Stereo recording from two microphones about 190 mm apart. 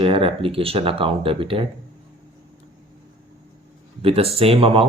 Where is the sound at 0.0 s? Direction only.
30° right (ahead or behind).